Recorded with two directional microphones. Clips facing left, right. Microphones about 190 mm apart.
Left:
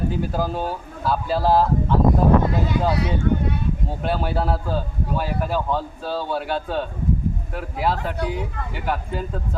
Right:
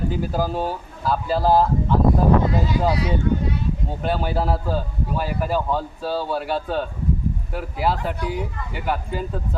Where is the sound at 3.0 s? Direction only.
60° left (ahead or behind).